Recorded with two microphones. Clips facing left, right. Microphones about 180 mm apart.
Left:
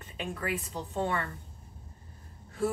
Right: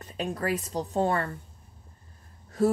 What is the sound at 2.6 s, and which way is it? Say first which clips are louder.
Speech: right 7 dB; 40° right (ahead or behind).